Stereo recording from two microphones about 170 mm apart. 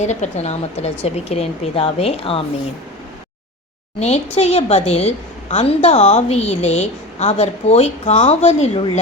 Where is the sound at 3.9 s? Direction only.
40° left (ahead or behind).